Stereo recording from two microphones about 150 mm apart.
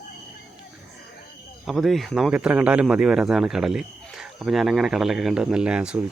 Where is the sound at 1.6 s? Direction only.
Centre (ahead or behind).